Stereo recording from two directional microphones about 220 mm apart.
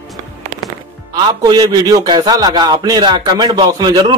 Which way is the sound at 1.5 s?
15° right (ahead or behind).